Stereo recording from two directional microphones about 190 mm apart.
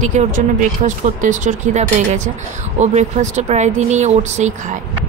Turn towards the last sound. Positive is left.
turn(degrees=-35)  # may be behind; listen again after turning